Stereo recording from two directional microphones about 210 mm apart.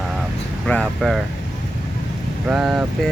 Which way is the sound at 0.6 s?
5° left (ahead or behind).